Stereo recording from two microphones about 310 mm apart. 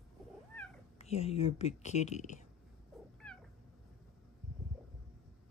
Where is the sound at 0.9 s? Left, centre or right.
Centre.